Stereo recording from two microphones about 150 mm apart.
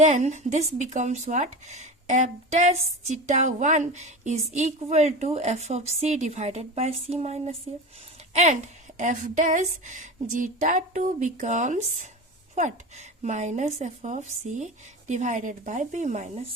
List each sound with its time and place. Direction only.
0.0 s a woman's voice: 50° right (ahead or behind)